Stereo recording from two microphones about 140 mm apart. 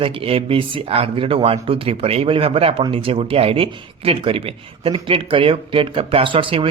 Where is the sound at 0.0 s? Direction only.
40° right (ahead or behind).